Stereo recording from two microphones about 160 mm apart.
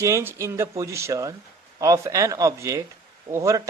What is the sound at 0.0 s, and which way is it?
Speech, 15° right (ahead or behind).